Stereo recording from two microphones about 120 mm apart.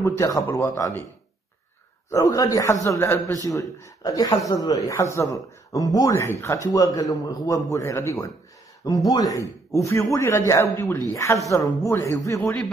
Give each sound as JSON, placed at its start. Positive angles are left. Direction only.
{"t": 0.0, "sound": "speech", "side_deg": 25}
{"t": 2.0, "sound": "a man's voice", "side_deg": 30}